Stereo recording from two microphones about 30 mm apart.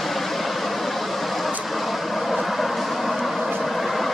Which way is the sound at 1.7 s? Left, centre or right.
Centre.